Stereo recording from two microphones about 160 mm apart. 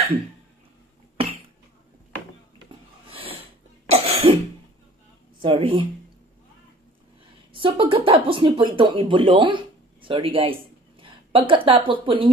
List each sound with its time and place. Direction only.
3.1 s a sound: 35° right (ahead or behind)
3.8 s cough: 40° right (ahead or behind)
5.4 s speech: 35° right (ahead or behind)
7.5 s speech: 35° right (ahead or behind)
11.0 s a sound: 35° right (ahead or behind)
11.9 s speech: 30° right (ahead or behind)